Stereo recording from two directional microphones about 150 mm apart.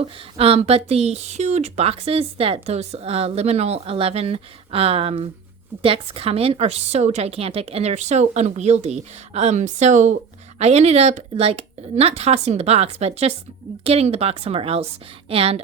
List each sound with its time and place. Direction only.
0.0 s speech: 40° right (ahead or behind)